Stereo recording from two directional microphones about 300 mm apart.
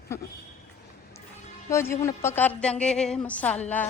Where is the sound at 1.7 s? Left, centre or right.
Centre.